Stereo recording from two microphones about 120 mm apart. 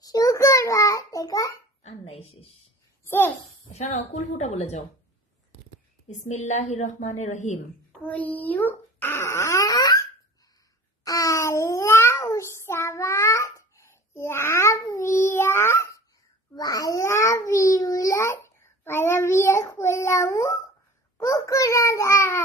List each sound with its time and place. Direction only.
0.0 s a sound: 30° left (ahead or behind)
1.8 s speech: 60° left (ahead or behind)
3.1 s a child's voice: 15° left (ahead or behind)
3.7 s a woman's voice: 75° left (ahead or behind)
6.0 s a woman's voice: 80° left
8.0 s a child's voice: 10° left (ahead or behind); by 10.0 s 30° left (ahead or behind)
11.1 s speech: 30° left (ahead or behind)